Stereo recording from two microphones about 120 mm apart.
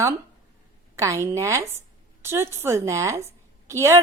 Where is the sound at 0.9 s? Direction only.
25° right (ahead or behind).